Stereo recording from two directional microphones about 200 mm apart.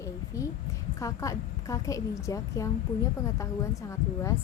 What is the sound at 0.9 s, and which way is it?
A woman's voice, 15° left (ahead or behind).